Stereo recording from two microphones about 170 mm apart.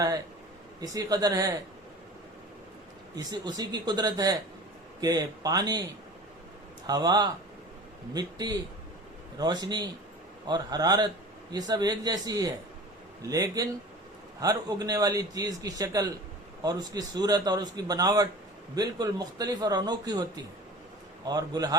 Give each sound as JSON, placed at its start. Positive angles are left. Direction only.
{"t": 0.8, "sound": "a man's voice", "side_deg": -20}
{"t": 3.2, "sound": "a man's voice", "side_deg": -25}
{"t": 6.8, "sound": "a man's voice", "side_deg": -25}